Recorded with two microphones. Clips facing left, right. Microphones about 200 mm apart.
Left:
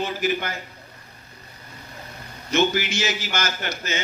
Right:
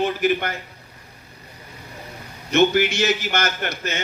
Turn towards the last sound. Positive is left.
turn(degrees=-55)  # may be behind; listen again after turning